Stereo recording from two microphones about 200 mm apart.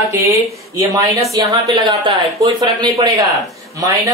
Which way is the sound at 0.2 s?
15° right (ahead or behind).